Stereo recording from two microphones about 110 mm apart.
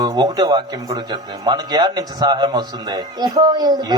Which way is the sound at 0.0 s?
40° right (ahead or behind).